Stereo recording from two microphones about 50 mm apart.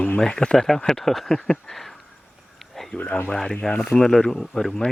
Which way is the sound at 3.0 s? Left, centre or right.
Left.